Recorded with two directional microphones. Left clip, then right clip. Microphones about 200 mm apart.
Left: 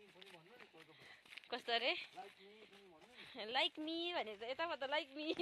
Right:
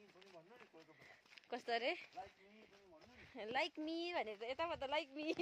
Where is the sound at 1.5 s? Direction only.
20° right (ahead or behind).